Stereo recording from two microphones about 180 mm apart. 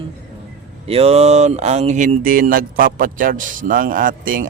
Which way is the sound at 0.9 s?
35° right (ahead or behind).